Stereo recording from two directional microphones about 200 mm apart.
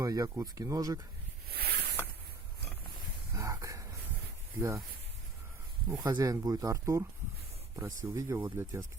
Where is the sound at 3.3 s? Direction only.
15° right (ahead or behind).